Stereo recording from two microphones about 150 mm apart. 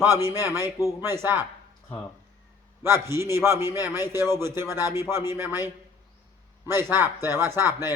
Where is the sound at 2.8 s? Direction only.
15° right (ahead or behind).